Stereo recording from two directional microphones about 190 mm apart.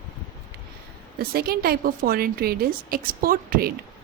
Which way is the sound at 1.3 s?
55° right (ahead or behind).